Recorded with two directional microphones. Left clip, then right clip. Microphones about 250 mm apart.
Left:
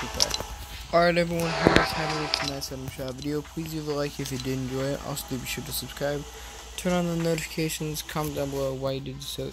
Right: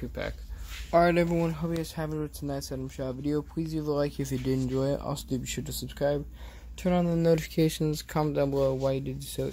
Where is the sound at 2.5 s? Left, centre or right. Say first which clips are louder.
Left 1 dB; centre.